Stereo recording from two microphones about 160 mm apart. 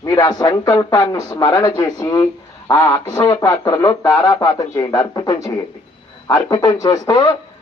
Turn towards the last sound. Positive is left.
turn(degrees=20)  # may be behind; listen again after turning